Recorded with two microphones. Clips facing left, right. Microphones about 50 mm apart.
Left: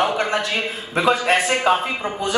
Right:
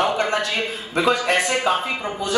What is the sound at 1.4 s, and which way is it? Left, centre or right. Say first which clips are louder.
Speech: left 2 dB; left.